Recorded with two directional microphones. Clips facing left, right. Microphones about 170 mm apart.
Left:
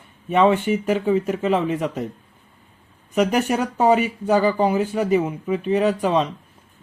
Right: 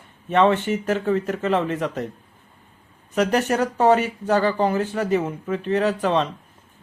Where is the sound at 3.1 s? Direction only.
10° left (ahead or behind).